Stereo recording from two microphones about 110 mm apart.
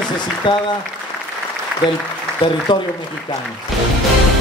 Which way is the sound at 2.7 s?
45° left (ahead or behind).